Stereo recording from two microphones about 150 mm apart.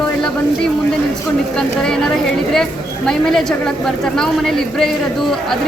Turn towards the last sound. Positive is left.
turn(degrees=5)  # may be behind; listen again after turning